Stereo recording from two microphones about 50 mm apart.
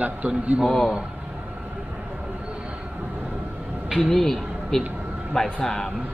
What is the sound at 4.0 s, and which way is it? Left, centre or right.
Speech, centre.